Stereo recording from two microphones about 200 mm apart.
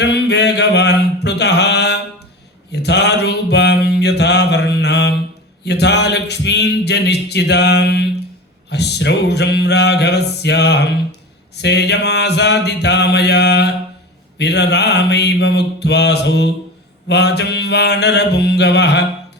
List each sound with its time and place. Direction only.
0.0 s mantra: 55° left (ahead or behind)
5.6 s speech: 55° left (ahead or behind)